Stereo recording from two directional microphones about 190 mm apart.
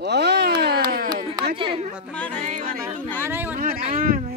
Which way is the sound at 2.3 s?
45° right (ahead or behind).